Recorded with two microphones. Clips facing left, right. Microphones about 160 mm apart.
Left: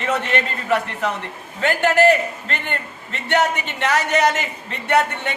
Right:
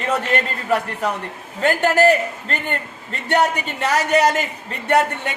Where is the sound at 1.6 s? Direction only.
40° right (ahead or behind).